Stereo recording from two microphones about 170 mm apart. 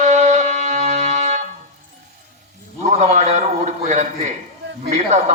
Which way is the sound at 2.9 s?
45° right (ahead or behind).